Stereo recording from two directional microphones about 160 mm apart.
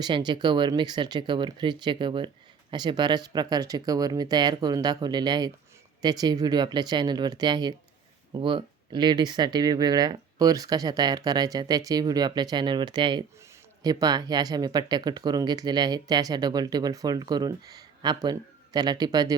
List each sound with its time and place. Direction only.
0.0 s speech: 25° right (ahead or behind)